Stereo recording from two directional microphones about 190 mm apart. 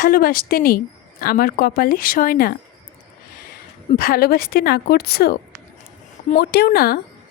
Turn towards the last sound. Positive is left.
turn(degrees=50)  # may be behind; listen again after turning